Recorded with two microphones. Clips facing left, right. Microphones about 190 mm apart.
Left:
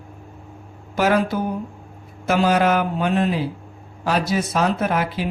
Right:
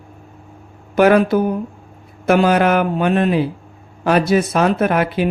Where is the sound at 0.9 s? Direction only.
60° right (ahead or behind).